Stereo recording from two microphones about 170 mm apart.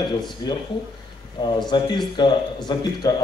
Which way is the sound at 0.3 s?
25° left (ahead or behind).